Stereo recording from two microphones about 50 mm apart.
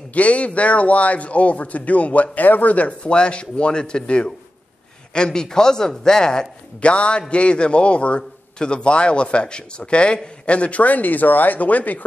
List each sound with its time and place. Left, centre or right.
0.1 s speech: left